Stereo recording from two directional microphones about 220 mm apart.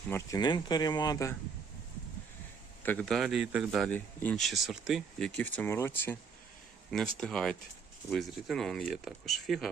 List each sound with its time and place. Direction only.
0.1 s speech: 15° left (ahead or behind)
2.8 s a man's voice: 5° left (ahead or behind)